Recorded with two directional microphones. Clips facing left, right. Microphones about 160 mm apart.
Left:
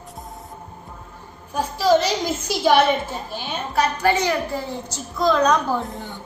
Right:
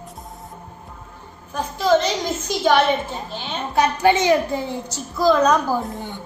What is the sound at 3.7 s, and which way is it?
Speech, 20° right (ahead or behind).